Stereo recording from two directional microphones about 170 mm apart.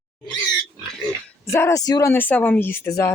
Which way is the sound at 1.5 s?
15° left (ahead or behind).